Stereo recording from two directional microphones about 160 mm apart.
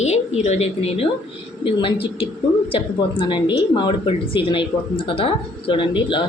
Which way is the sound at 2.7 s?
35° left (ahead or behind).